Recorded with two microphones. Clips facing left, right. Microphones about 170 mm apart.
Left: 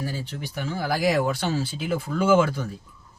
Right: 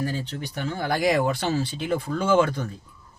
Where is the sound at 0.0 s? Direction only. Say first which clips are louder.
Right 3 dB; 5° left (ahead or behind).